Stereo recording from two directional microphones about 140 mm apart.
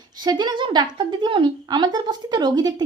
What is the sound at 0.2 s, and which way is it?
A woman's voice, 30° right (ahead or behind).